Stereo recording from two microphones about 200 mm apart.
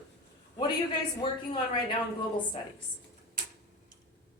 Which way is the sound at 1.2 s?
25° left (ahead or behind).